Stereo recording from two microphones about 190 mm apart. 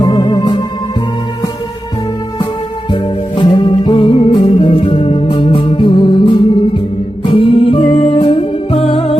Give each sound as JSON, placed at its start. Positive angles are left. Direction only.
{"t": 0.0, "sound": "music", "side_deg": 20}
{"t": 2.9, "sound": "music", "side_deg": 25}